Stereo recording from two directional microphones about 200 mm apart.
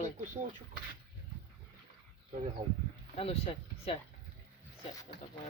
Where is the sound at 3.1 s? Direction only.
30° left (ahead or behind).